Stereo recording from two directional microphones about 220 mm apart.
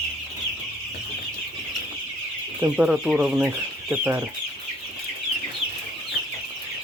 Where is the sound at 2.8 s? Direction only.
5° right (ahead or behind).